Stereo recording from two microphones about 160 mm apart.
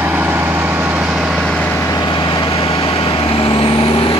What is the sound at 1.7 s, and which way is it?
Vehicle, 15° left (ahead or behind).